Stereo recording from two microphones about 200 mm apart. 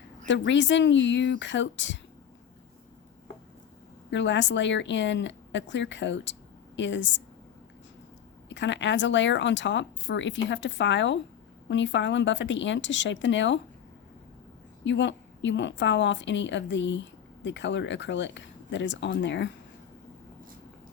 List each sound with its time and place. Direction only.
0.3 s a woman's voice: 65° left (ahead or behind)
4.1 s a woman's voice: 65° left (ahead or behind)
8.4 s a woman's voice: 65° left (ahead or behind)
14.8 s a woman's voice: 65° left (ahead or behind)